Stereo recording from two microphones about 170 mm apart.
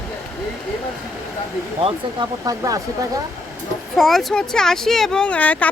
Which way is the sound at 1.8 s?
25° right (ahead or behind).